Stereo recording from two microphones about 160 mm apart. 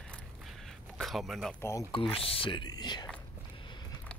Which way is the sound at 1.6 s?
15° left (ahead or behind).